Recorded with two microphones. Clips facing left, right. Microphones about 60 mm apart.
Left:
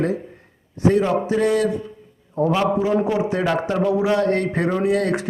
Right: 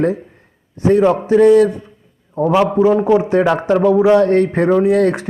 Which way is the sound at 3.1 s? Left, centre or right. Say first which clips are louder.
Right 7 dB; right.